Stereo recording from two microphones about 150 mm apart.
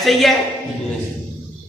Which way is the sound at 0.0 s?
Centre (ahead or behind).